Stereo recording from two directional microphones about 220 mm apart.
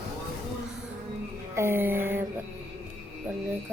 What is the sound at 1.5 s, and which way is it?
Speech, 10° right (ahead or behind).